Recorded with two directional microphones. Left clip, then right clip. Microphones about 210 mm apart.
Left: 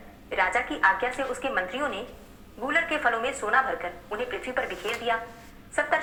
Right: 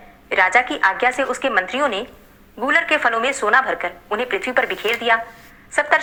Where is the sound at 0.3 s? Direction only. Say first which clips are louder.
Right 10 dB; 35° right (ahead or behind).